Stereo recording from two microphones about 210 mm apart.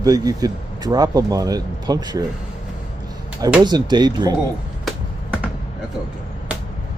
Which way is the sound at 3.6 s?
20° right (ahead or behind).